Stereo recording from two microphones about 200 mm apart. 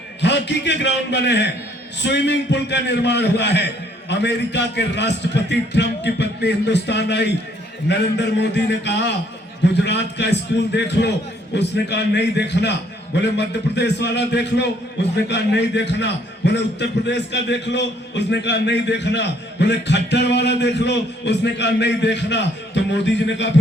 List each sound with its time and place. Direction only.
0.2 s a man's voice: 60° left (ahead or behind)